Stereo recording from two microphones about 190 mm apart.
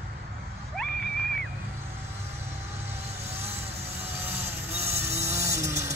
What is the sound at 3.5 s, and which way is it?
Vehicle, 30° right (ahead or behind).